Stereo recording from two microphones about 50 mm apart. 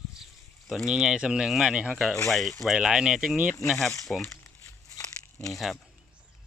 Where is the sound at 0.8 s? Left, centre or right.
Centre.